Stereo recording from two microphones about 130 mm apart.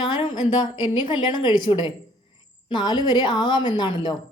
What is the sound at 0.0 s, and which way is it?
A woman's voice, 35° left (ahead or behind).